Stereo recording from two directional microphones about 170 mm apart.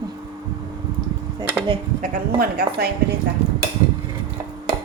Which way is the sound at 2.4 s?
65° right (ahead or behind).